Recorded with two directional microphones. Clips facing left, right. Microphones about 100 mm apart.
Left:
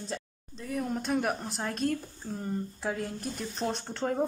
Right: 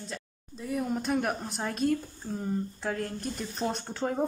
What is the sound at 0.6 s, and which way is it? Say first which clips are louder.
Speech: right 2 dB; 5° right (ahead or behind).